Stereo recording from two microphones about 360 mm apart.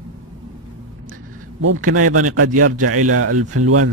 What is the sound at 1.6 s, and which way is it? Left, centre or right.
Speech, right.